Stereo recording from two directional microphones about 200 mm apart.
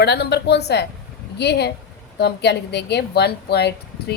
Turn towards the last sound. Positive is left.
turn(degrees=55)  # may be behind; listen again after turning